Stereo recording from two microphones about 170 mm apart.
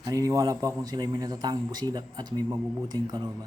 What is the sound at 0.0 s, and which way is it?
A man's voice, 20° right (ahead or behind).